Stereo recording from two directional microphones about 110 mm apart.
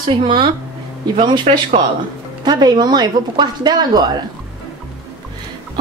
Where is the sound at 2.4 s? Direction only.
40° right (ahead or behind).